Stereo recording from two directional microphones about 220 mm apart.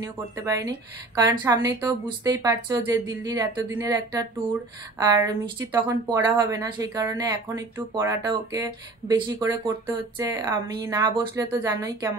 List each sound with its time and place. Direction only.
0.0 s speech: 15° right (ahead or behind)